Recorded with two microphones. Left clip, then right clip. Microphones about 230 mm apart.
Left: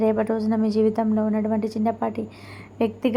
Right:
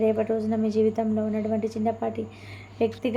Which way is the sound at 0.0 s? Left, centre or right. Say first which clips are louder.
Left 2 dB; left.